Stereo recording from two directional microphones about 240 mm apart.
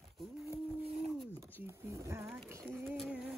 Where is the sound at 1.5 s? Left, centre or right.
Centre.